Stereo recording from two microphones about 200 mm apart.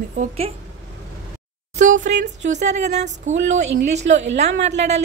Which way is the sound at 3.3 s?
75° right (ahead or behind).